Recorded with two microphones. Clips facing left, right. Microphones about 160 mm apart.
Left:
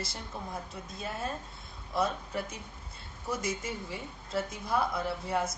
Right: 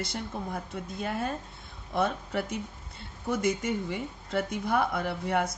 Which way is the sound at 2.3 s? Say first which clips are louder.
Right 4 dB; 70° right (ahead or behind).